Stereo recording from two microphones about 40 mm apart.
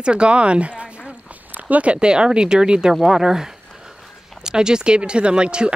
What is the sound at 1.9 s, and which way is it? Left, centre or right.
Speech, right.